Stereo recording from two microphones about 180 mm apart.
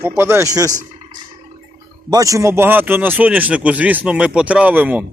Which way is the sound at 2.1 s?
20° right (ahead or behind).